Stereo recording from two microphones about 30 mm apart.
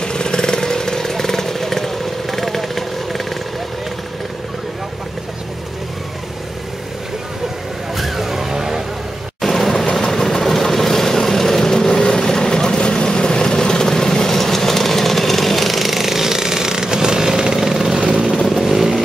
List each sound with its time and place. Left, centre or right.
0.0 s vehicle: left; by 3.3 s centre
7.9 s vehicle: centre
9.4 s vehicle: centre
17.9 s vehicle: right
18.5 s vehicle: centre